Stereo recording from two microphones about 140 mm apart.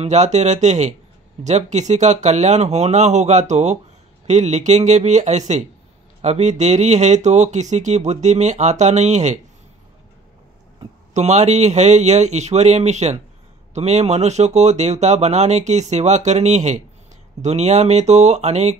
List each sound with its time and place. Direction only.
0.0 s speech: 55° right (ahead or behind)
11.1 s speech: 55° right (ahead or behind)